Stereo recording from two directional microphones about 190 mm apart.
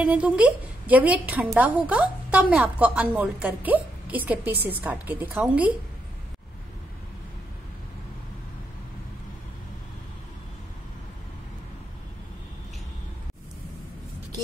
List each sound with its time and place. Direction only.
0.0 s a woman's voice: 5° right (ahead or behind)